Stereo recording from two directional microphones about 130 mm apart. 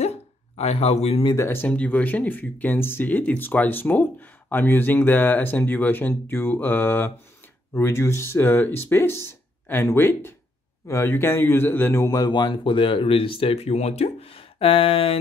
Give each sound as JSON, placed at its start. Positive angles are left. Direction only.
{"t": 0.0, "sound": "hiccup", "side_deg": 55}
{"t": 1.3, "sound": "speech", "side_deg": 20}